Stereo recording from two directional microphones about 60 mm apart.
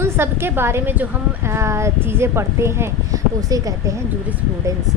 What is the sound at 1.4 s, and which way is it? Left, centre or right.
A woman's voice, right.